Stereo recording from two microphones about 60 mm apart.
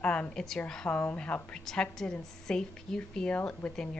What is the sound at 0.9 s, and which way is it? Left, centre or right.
Speech, left.